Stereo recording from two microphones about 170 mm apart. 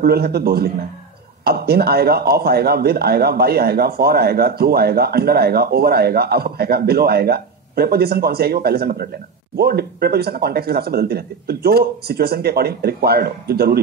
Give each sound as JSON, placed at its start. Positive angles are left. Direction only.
{"t": 0.0, "sound": "speech", "side_deg": -65}